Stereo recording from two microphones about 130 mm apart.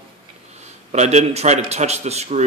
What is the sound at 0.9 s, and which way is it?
A man's voice, 60° right (ahead or behind).